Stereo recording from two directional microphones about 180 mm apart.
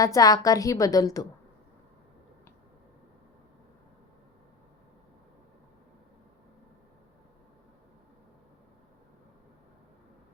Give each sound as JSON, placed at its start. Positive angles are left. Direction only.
{"t": 0.0, "sound": "a woman's voice", "side_deg": 20}